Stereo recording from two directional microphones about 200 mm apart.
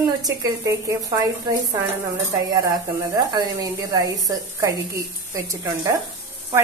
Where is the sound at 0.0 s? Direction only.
15° right (ahead or behind).